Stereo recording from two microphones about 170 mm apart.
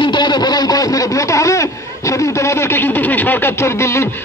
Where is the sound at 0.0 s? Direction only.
25° left (ahead or behind).